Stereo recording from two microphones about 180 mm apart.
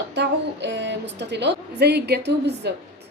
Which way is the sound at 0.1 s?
75° right (ahead or behind).